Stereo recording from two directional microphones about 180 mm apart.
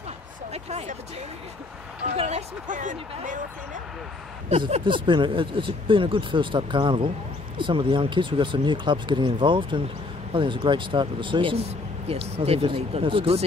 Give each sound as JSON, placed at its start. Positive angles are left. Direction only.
{"t": 0.5, "sound": "speech", "side_deg": -35}
{"t": 2.1, "sound": "speech", "side_deg": -40}
{"t": 4.5, "sound": "speech", "side_deg": -35}